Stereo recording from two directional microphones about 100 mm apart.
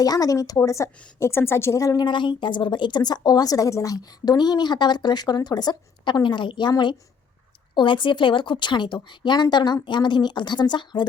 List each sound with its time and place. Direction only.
0.0 s a woman's voice: 40° left (ahead or behind)